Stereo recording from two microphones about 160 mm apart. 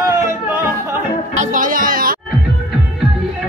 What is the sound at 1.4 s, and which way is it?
Music, 55° right (ahead or behind).